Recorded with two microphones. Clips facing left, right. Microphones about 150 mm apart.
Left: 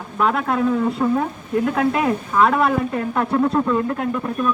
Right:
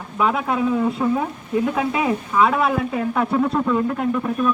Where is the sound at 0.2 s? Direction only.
5° right (ahead or behind).